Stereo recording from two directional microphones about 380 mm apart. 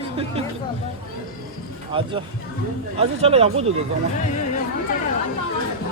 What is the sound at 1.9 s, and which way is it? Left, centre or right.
Speech, centre.